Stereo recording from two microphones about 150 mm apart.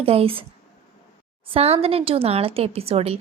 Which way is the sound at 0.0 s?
40° right (ahead or behind).